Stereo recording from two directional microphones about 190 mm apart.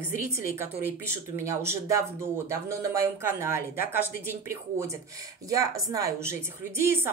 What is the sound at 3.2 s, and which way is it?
A woman's voice, 15° right (ahead or behind).